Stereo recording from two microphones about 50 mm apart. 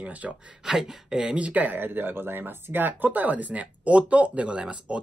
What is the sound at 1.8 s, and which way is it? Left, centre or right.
Speech, right.